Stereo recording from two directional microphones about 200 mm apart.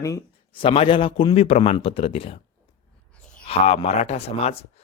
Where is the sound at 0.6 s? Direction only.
25° left (ahead or behind).